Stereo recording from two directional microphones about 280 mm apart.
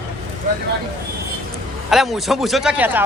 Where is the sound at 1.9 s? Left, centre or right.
Centre.